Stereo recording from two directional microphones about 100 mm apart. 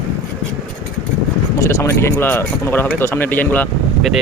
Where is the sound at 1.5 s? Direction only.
30° left (ahead or behind).